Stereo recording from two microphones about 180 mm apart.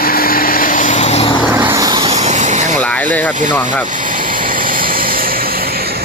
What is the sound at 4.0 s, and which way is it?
Vehicle, 50° right (ahead or behind).